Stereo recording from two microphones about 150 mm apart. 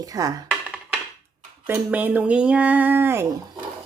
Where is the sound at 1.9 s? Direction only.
10° right (ahead or behind).